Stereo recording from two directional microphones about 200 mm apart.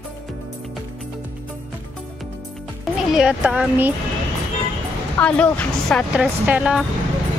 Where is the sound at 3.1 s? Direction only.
5° right (ahead or behind).